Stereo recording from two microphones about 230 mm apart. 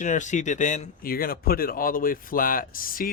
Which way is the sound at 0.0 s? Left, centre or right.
Left.